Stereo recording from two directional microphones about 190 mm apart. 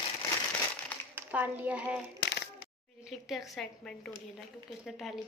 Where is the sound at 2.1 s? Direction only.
65° left (ahead or behind).